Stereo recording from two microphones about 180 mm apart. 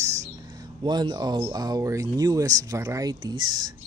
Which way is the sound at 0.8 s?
25° right (ahead or behind).